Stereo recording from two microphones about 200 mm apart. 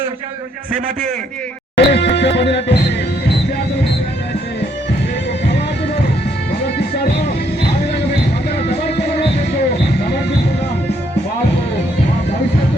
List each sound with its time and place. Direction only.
1.7 s music: 55° left (ahead or behind)
6.7 s music: 55° left (ahead or behind)
8.8 s music: 55° left (ahead or behind)